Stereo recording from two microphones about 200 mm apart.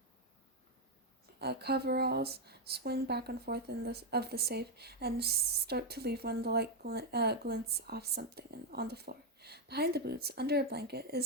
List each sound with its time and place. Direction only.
1.4 s speech: 55° right (ahead or behind)